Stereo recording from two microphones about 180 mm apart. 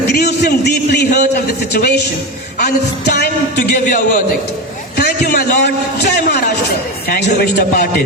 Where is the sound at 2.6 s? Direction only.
50° left (ahead or behind).